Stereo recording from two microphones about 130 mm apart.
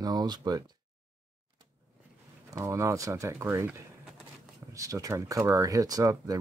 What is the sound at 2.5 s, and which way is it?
Speech, 25° right (ahead or behind).